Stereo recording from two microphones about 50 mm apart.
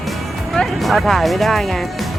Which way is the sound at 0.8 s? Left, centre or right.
Centre.